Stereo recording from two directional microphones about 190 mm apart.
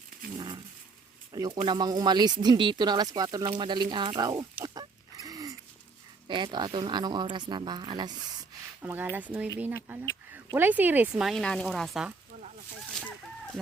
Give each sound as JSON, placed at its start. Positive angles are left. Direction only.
{"t": 0.3, "sound": "dog", "side_deg": -25}
{"t": 1.3, "sound": "speech", "side_deg": -20}
{"t": 4.6, "sound": "pig", "side_deg": -20}
{"t": 6.2, "sound": "speech", "side_deg": -25}
{"t": 8.8, "sound": "speech", "side_deg": -10}
{"t": 12.9, "sound": "chicken", "side_deg": 5}